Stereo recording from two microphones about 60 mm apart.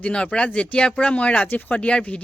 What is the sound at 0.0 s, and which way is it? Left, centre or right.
Speech, centre.